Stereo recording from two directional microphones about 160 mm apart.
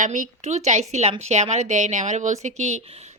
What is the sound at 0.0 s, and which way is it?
A woman's voice, 50° right (ahead or behind).